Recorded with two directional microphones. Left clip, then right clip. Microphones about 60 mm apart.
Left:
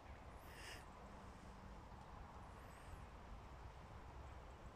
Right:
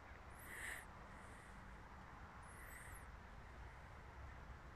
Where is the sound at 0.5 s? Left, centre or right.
Left.